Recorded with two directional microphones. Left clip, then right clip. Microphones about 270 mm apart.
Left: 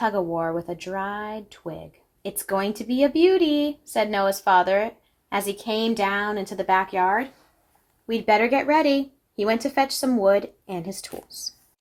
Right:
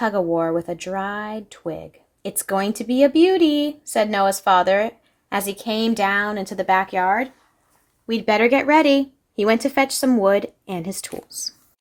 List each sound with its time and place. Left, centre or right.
0.0 s speech: right